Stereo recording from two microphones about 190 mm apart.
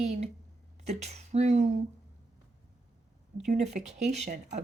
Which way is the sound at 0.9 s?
35° right (ahead or behind).